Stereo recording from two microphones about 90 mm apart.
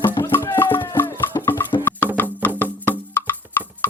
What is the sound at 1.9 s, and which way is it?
Music, 20° left (ahead or behind).